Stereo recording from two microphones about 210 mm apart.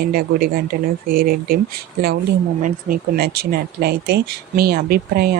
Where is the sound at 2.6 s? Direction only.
40° right (ahead or behind).